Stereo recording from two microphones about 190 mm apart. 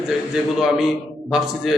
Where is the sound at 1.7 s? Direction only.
Centre (ahead or behind).